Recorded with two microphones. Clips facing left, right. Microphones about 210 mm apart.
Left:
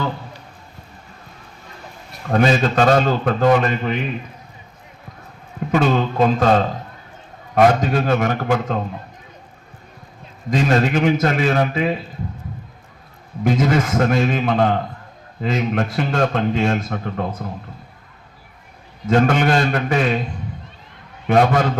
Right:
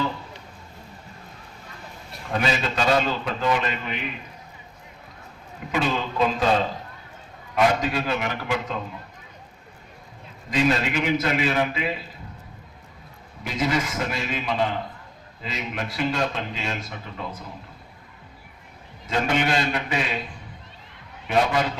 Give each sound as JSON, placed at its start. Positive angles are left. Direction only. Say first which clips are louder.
{"t": 2.3, "sound": "a man's voice", "louder": "left 9 dB", "side_deg": 45}
{"t": 5.7, "sound": "a man's voice", "louder": "left 7 dB", "side_deg": 50}
{"t": 10.5, "sound": "a man's voice", "louder": "left 5 dB", "side_deg": 45}
{"t": 13.4, "sound": "a man's voice", "louder": "left 8 dB", "side_deg": 50}
{"t": 19.0, "sound": "a man's voice", "louder": "left 8 dB", "side_deg": 50}
{"t": 21.2, "sound": "a man's voice", "louder": "left 6 dB", "side_deg": 55}